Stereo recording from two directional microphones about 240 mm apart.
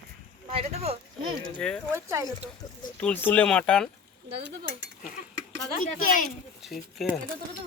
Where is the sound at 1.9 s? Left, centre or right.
Centre.